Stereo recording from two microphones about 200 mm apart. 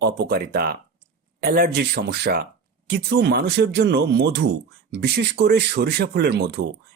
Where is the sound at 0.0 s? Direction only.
55° right (ahead or behind).